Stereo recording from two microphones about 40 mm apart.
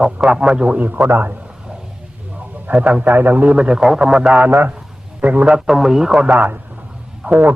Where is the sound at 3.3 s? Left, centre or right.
Right.